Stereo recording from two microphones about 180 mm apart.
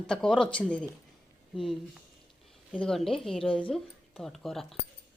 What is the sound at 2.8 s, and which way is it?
Speech, centre (ahead or behind).